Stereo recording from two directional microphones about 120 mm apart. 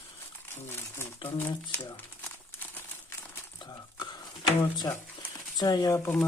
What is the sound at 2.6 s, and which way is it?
Crumpling, 20° left (ahead or behind).